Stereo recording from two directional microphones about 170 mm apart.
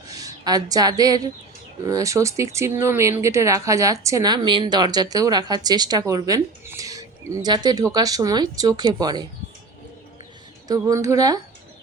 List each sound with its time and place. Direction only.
0.1 s speech: 20° right (ahead or behind)
10.7 s speech: 20° right (ahead or behind)